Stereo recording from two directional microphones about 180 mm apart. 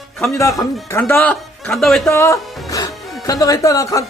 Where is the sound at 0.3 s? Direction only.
15° left (ahead or behind); by 2.1 s centre (ahead or behind).